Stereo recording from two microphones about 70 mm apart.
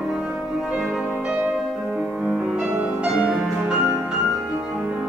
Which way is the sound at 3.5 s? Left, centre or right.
Centre.